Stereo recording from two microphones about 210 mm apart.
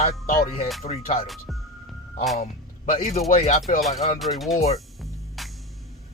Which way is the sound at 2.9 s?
30° left (ahead or behind).